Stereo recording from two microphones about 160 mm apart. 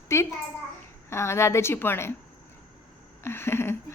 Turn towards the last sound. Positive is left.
turn(degrees=15)  # may be behind; listen again after turning